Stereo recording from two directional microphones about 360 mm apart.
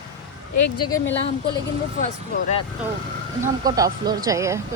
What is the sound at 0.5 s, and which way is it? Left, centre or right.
Speech, left.